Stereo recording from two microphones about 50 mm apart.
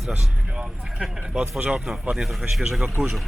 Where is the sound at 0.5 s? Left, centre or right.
Centre.